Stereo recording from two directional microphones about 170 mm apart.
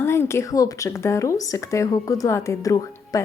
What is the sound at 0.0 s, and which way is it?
Speech, 15° left (ahead or behind).